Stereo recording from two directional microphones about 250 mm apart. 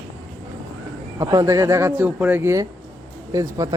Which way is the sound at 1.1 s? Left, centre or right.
Centre.